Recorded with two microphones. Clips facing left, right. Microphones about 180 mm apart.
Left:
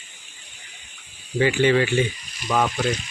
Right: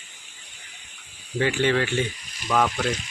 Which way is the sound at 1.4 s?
5° left (ahead or behind).